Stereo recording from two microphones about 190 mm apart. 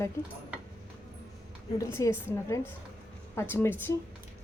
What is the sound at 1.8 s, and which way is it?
A woman's voice, 15° left (ahead or behind).